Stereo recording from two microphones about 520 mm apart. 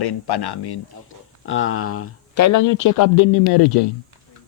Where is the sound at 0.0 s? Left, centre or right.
Left.